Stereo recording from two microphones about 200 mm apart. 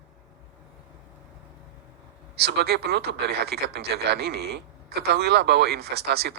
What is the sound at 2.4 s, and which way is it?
Speech, 55° right (ahead or behind).